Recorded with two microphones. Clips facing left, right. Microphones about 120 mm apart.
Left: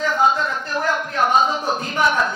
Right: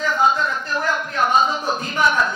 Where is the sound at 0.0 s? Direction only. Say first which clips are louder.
Even; 55° left (ahead or behind).